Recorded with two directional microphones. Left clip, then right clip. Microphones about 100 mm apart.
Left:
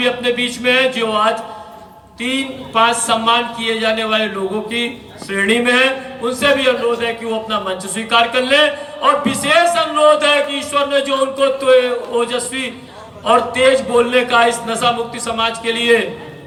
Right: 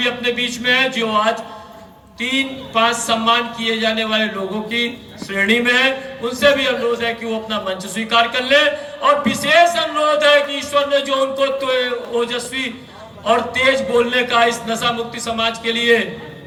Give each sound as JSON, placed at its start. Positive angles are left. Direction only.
{"t": 0.0, "sound": "a man's voice", "side_deg": 40}
{"t": 5.3, "sound": "a man's voice", "side_deg": 40}